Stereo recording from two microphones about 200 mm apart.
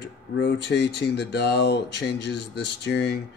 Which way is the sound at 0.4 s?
55° left (ahead or behind).